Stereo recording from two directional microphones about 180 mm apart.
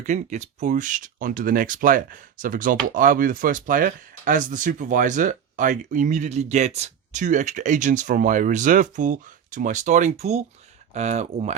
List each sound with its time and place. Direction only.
0.0 s speech: 40° right (ahead or behind)